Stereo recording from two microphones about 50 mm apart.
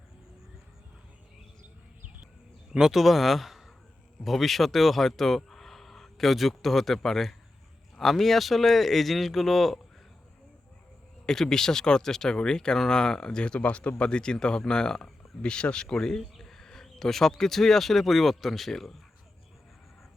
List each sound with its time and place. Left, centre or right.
2.7 s speech: centre
11.3 s speech: centre